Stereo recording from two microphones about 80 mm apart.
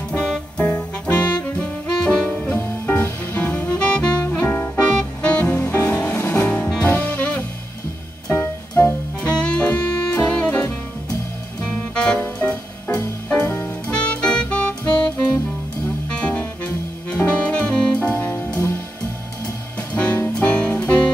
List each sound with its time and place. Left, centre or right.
0.1 s music: centre
6.7 s saxophone: centre
8.3 s music: left
11.9 s music: centre
19.9 s music: centre